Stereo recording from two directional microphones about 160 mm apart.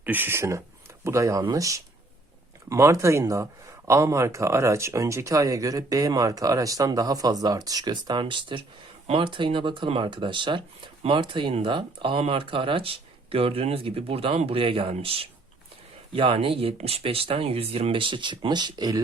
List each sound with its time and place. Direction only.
0.0 s speech: 10° right (ahead or behind)